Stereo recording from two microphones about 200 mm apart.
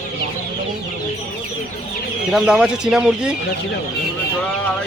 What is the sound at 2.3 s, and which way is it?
Speech, 5° right (ahead or behind).